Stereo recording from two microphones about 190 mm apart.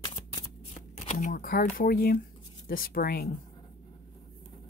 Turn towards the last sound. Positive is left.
turn(degrees=50)  # may be behind; listen again after turning